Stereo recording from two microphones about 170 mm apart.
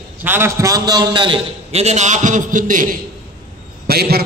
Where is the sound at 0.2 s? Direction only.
15° right (ahead or behind); by 3.0 s 50° right (ahead or behind).